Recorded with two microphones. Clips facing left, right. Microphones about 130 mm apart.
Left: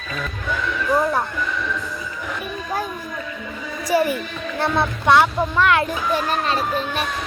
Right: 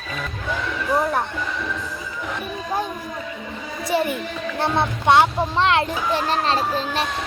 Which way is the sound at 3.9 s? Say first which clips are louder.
Left 3 dB; 25° right (ahead or behind).